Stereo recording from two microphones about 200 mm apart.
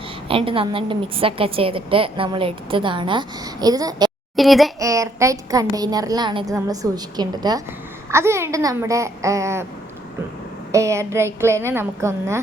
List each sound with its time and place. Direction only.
0.3 s a woman's voice: 25° right (ahead or behind)
4.4 s speech: centre (ahead or behind)
4.8 s speech: 15° right (ahead or behind)
10.7 s speech: 15° right (ahead or behind)